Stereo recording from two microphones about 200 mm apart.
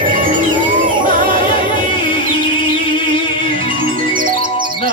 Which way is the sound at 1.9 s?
25° left (ahead or behind).